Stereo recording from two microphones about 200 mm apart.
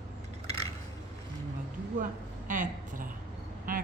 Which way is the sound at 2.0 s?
40° right (ahead or behind).